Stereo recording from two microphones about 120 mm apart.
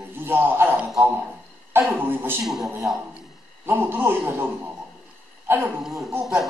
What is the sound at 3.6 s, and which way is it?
Speech, 15° right (ahead or behind).